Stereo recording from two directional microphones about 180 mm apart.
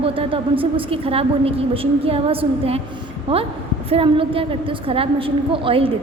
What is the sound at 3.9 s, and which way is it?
A woman's voice, 30° right (ahead or behind).